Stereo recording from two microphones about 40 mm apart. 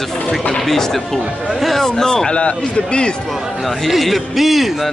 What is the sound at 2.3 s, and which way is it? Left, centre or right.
Speech, left.